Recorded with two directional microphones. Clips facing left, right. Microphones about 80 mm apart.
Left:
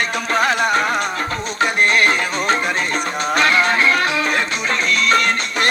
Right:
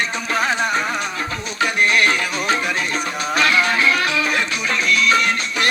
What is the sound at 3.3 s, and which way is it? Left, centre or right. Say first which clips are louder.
Music: left 2 dB; left.